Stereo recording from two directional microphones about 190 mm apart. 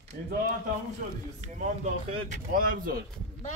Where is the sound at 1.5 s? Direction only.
40° right (ahead or behind).